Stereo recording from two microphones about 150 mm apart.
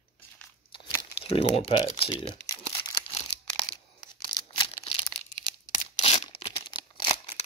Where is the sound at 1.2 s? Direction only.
40° left (ahead or behind).